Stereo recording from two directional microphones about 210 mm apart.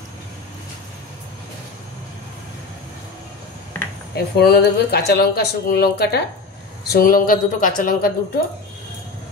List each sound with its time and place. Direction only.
4.1 s speech: 50° left (ahead or behind)